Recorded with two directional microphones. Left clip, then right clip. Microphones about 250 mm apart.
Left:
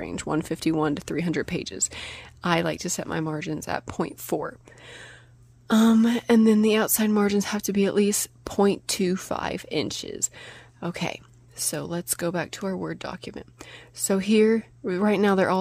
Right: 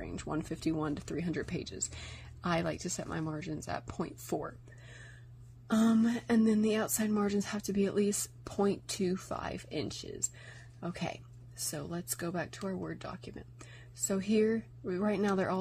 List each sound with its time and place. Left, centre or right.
0.0 s speech: left